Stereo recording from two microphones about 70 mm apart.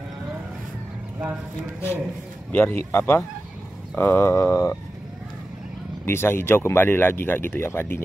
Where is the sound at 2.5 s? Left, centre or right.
Left.